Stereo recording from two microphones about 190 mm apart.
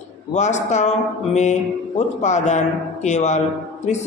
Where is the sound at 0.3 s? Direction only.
35° left (ahead or behind).